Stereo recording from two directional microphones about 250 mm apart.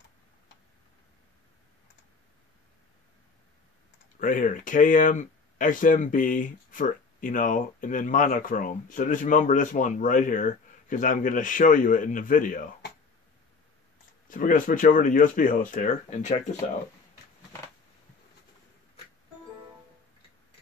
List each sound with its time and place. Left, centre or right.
4.2 s speech: left
14.3 s speech: left